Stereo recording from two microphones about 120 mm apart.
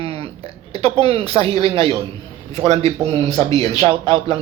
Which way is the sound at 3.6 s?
55° right (ahead or behind).